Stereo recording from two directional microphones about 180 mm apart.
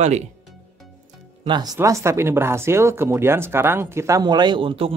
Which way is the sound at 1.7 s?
15° right (ahead or behind).